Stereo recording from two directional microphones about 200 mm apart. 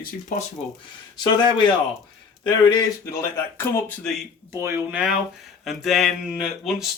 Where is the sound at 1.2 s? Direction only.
20° left (ahead or behind).